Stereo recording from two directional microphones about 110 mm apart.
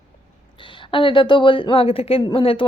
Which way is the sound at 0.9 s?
50° left (ahead or behind).